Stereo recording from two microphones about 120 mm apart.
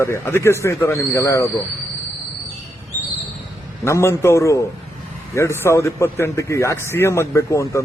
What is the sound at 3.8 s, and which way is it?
Speech, 25° left (ahead or behind).